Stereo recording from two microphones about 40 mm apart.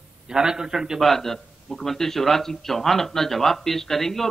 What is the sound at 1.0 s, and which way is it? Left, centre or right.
Speech, centre.